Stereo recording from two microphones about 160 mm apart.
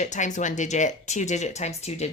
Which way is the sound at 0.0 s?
50° left (ahead or behind).